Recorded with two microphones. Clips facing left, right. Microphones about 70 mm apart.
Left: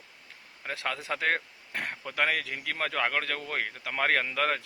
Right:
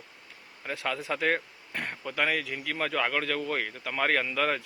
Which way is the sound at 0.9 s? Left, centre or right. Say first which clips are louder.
Right 2 dB; left.